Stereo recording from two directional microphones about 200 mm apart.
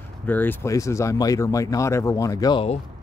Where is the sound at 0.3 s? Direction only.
10° left (ahead or behind); by 2.8 s 25° left (ahead or behind).